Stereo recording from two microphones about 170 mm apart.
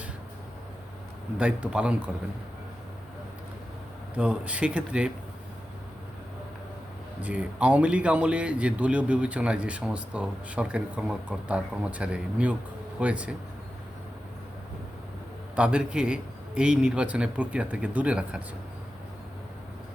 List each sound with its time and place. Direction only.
1.4 s speech: 5° right (ahead or behind)
4.1 s speech: 10° right (ahead or behind)
7.2 s speech: 10° right (ahead or behind)
15.5 s speech: 5° right (ahead or behind)